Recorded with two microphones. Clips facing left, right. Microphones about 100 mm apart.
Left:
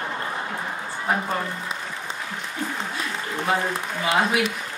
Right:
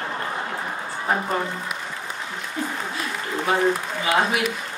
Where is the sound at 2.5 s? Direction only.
10° right (ahead or behind).